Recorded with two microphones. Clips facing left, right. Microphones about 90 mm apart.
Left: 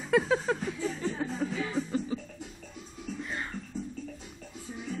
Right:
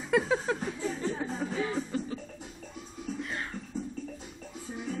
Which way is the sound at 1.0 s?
5° right (ahead or behind).